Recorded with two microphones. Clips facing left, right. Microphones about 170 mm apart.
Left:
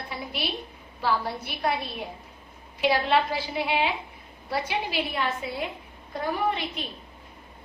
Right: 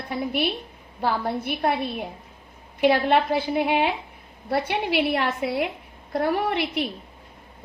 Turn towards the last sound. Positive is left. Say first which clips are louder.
# right 4 dB
turn(degrees=-75)  # may be behind; listen again after turning